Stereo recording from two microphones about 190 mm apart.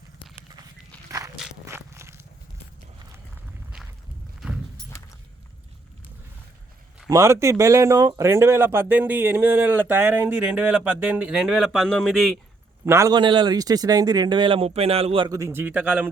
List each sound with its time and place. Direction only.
1.6 s a sound: 15° right (ahead or behind)
7.1 s speech: 15° right (ahead or behind); by 12.4 s centre (ahead or behind)
12.8 s a man's voice: 15° right (ahead or behind)